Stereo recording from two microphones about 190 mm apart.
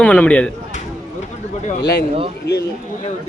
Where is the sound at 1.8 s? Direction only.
60° left (ahead or behind).